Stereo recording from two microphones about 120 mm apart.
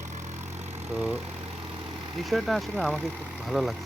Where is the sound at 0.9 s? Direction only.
10° right (ahead or behind).